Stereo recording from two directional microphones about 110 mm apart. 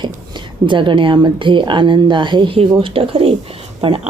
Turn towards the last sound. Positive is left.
turn(degrees=-60)  # may be behind; listen again after turning